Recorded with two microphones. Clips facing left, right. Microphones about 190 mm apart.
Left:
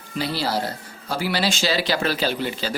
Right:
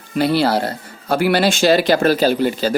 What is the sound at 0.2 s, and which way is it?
Speech, 60° right (ahead or behind).